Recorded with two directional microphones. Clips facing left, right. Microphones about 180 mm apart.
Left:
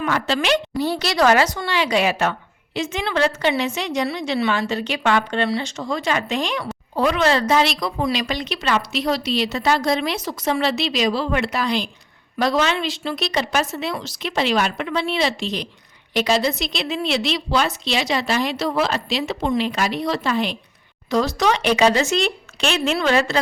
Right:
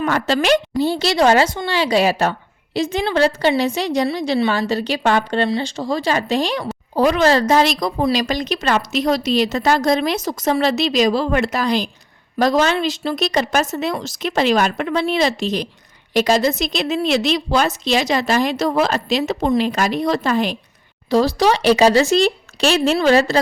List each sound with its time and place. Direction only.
0.0 s a woman's voice: 40° right (ahead or behind)
0.8 s a woman's voice: 25° right (ahead or behind); by 20.6 s 45° right (ahead or behind)
21.1 s a woman's voice: 30° right (ahead or behind)